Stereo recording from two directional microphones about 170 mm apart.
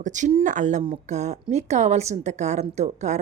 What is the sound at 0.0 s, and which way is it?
A woman's voice, 45° right (ahead or behind).